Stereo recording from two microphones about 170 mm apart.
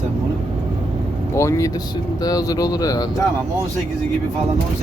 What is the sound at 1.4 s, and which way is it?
Speech, 15° left (ahead or behind).